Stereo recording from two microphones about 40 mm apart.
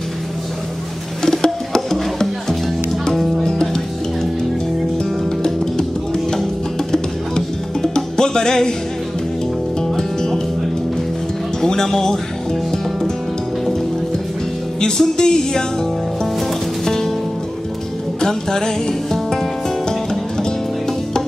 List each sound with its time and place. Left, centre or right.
1.2 s music: centre
6.9 s music: centre
11.6 s speech: centre
14.8 s music: centre
18.2 s music: centre